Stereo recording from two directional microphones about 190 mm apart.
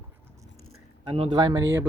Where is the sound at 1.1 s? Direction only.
25° right (ahead or behind).